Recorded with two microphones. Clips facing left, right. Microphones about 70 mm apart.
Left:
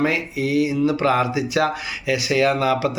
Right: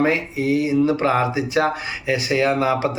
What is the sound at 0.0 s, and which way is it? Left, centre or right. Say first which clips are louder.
A man's voice: right 2 dB; right.